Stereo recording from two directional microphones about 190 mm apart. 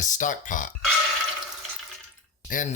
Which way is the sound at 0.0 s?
40° left (ahead or behind).